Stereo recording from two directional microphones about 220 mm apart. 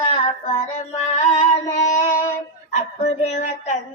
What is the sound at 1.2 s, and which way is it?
Female singing, 35° left (ahead or behind).